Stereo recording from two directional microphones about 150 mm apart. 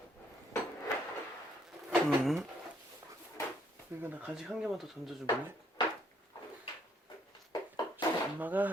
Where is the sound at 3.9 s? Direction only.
15° right (ahead or behind).